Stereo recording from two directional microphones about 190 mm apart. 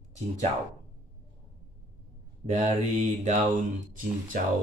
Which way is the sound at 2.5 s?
40° right (ahead or behind).